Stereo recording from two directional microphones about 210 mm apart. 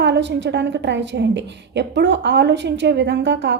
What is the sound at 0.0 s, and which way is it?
A woman's voice, 55° right (ahead or behind).